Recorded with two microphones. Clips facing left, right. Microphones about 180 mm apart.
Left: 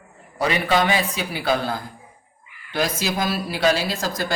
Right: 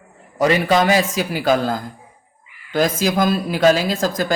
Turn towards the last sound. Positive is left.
turn(degrees=-45)  # may be behind; listen again after turning